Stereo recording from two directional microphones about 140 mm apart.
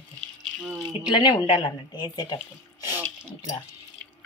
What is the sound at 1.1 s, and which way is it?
Speech, 30° left (ahead or behind).